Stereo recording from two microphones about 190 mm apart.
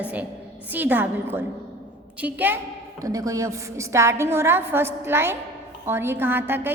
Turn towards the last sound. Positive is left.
turn(degrees=-10)  # may be behind; listen again after turning